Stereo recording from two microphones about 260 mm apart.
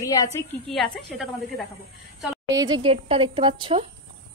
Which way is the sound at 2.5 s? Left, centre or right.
Centre.